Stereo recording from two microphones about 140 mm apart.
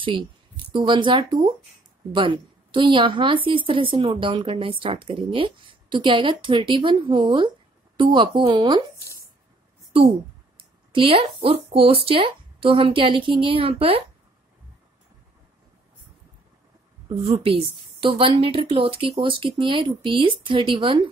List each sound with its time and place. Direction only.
0.7 s a woman's voice: 35° right (ahead or behind)
10.6 s a sound: 40° right (ahead or behind)
11.4 s a woman's voice: 40° right (ahead or behind)
17.1 s a woman's voice: 45° right (ahead or behind)